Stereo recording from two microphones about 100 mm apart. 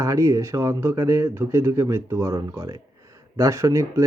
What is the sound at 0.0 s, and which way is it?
Speech, 30° right (ahead or behind).